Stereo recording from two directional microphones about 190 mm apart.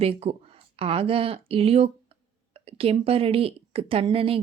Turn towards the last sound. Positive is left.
turn(degrees=-30)  # may be behind; listen again after turning